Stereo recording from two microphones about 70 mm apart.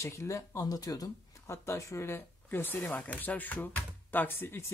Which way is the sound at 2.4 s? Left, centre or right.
Left.